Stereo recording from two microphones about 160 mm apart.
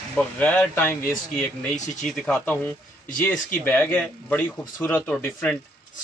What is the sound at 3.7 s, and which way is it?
Speech, 10° left (ahead or behind).